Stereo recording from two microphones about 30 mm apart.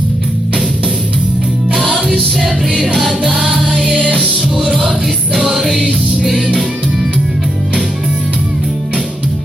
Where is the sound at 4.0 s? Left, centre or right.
Right.